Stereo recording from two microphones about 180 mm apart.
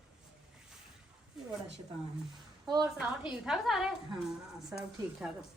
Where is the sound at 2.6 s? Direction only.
20° right (ahead or behind).